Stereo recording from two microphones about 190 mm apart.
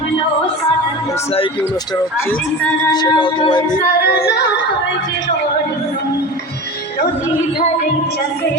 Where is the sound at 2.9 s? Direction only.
25° left (ahead or behind).